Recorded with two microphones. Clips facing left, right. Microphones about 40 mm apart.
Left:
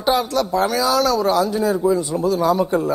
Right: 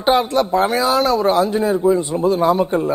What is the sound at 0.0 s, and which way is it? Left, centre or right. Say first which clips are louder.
A man's voice: right 3 dB; right.